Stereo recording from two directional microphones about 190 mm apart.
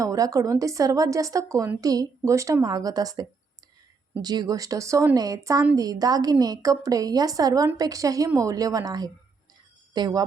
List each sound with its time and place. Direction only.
0.0 s a woman's voice: 15° right (ahead or behind)